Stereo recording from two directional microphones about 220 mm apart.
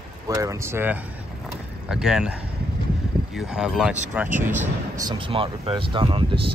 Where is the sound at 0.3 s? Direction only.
15° right (ahead or behind).